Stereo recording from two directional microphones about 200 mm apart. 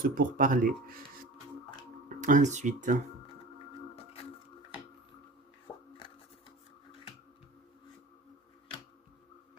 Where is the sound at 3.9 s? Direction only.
30° left (ahead or behind).